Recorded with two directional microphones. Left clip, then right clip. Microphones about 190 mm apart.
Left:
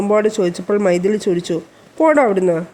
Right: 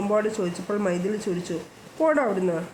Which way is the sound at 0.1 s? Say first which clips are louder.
Left 9 dB; 40° left (ahead or behind).